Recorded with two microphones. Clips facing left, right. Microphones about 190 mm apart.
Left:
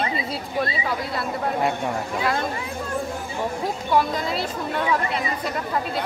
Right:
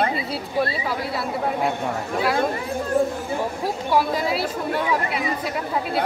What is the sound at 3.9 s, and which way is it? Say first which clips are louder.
Speech: right 1 dB; 5° right (ahead or behind).